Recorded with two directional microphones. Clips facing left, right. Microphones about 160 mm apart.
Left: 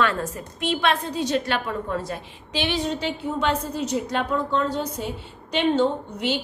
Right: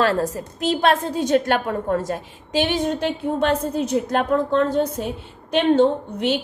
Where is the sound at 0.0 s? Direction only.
35° right (ahead or behind).